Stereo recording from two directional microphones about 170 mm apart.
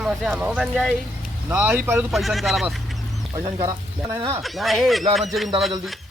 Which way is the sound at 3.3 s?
20° right (ahead or behind).